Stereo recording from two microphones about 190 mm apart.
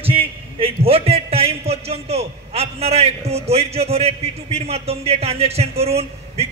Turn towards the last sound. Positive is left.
turn(degrees=-35)  # may be behind; listen again after turning